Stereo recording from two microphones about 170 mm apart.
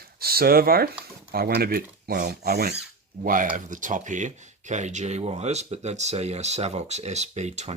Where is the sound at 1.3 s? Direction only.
65° right (ahead or behind).